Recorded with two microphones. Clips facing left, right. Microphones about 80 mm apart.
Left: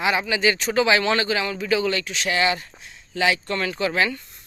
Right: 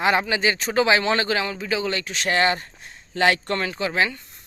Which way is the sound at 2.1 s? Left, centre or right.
Right.